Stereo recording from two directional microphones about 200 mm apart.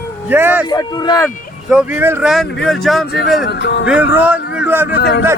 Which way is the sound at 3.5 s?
60° left (ahead or behind).